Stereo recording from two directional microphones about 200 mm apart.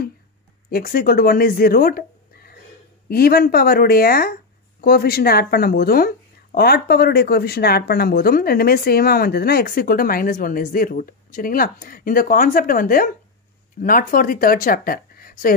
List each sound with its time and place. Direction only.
0.7 s speech: 50° left (ahead or behind)